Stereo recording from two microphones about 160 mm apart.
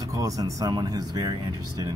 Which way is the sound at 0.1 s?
20° right (ahead or behind).